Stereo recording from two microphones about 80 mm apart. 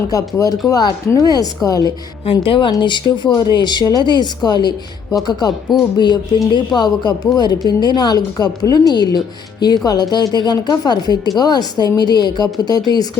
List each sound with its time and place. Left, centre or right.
0.1 s speech: left
2.3 s speech: left
3.3 s speech: left